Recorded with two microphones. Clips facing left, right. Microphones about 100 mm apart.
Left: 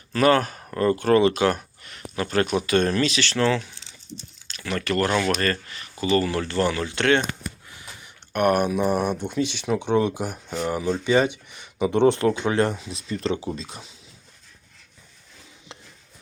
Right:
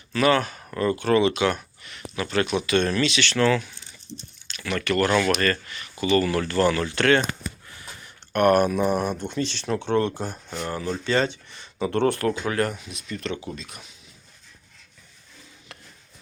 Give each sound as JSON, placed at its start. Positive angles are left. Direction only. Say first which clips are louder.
{"t": 0.1, "sound": "speech", "louder": "left 2 dB", "side_deg": 40}
{"t": 7.7, "sound": "a sound", "louder": "right 1 dB", "side_deg": 15}
{"t": 8.8, "sound": "speech", "louder": "left 1 dB", "side_deg": 5}